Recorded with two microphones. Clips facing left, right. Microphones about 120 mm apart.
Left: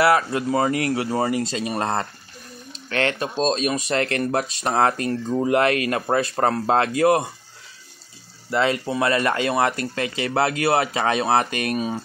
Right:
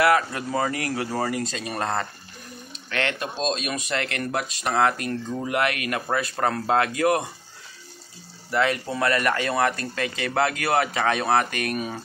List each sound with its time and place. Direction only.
0.0 s speech: 25° left (ahead or behind)
8.5 s speech: 25° left (ahead or behind)